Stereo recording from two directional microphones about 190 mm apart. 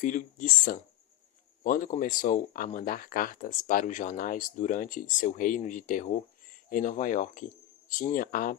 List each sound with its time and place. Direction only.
0.0 s speech: 40° left (ahead or behind)